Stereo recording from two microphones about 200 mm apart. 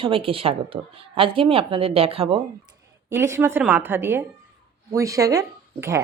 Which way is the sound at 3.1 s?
10° right (ahead or behind).